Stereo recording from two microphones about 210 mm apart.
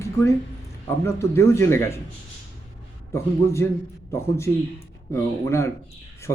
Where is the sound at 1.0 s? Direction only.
10° left (ahead or behind).